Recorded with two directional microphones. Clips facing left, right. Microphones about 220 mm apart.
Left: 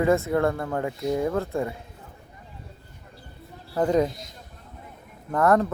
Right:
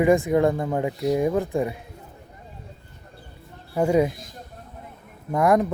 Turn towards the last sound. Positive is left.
turn(degrees=-15)  # may be behind; listen again after turning